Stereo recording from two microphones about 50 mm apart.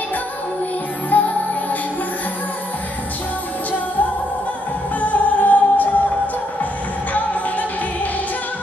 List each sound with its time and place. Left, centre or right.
1.1 s music: left
5.0 s music: left
7.2 s music: left